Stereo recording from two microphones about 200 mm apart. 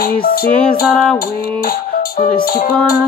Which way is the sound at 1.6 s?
45° left (ahead or behind).